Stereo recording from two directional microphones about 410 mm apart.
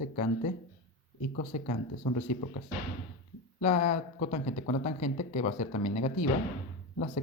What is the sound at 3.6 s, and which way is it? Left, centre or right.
Speech, centre.